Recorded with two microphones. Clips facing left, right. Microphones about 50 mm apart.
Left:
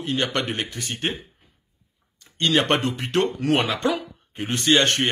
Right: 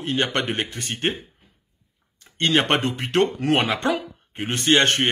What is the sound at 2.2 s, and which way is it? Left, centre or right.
Speech, right.